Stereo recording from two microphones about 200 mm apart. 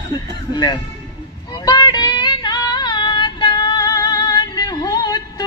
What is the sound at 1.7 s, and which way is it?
Female singing, 20° left (ahead or behind).